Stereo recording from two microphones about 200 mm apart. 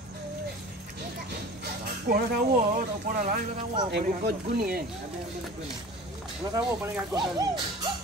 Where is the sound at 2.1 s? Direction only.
50° right (ahead or behind).